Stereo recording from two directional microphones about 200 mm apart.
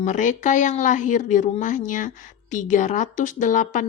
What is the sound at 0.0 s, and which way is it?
Speech, 40° left (ahead or behind).